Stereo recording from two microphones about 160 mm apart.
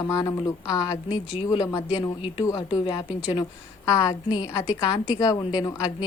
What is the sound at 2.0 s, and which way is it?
Speech, 35° left (ahead or behind).